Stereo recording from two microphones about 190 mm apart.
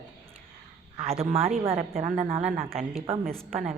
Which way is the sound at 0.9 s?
30° right (ahead or behind).